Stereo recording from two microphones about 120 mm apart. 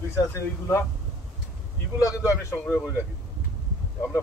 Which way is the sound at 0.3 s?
20° left (ahead or behind).